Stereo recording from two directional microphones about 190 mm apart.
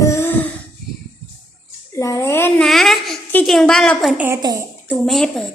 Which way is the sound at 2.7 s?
Centre (ahead or behind).